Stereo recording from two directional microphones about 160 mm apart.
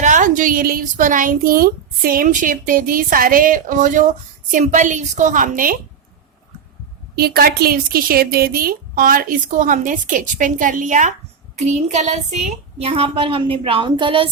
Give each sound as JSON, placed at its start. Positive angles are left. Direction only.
{"t": 0.0, "sound": "a woman's voice", "side_deg": -50}
{"t": 7.2, "sound": "a woman's voice", "side_deg": -75}
{"t": 12.8, "sound": "a woman's voice", "side_deg": -35}